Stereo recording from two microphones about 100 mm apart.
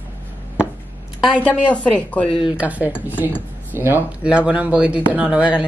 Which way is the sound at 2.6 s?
15° right (ahead or behind).